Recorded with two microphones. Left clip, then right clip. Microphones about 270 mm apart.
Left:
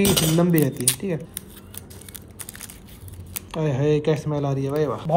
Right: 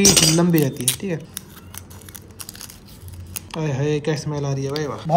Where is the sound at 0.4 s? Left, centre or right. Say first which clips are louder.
Right 1 dB; centre.